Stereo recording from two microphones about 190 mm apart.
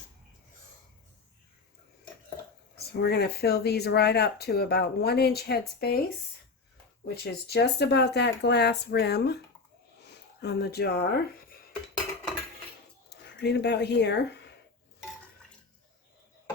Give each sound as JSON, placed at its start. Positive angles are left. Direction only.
{"t": 2.7, "sound": "speech", "side_deg": 60}
{"t": 7.1, "sound": "speech", "side_deg": 55}
{"t": 13.1, "sound": "speech", "side_deg": 60}